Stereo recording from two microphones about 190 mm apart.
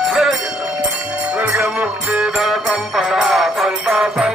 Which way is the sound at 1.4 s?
5° right (ahead or behind).